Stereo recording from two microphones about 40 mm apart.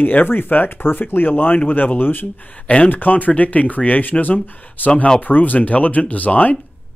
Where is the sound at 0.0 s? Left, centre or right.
Left.